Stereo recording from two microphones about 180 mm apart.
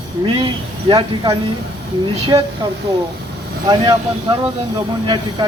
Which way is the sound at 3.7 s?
25° right (ahead or behind).